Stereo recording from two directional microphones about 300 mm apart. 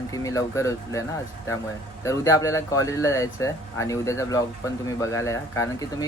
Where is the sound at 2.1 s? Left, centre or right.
Centre.